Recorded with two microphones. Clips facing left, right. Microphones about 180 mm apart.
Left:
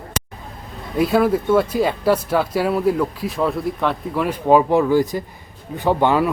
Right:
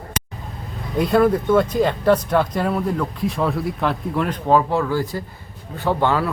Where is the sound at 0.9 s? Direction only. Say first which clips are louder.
Even; 5° left (ahead or behind).